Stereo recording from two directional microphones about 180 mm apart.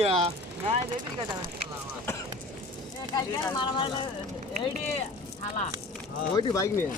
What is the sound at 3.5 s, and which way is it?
Speech, 25° left (ahead or behind).